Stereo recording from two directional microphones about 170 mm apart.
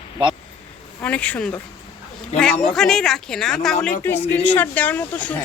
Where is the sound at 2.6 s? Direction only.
5° left (ahead or behind).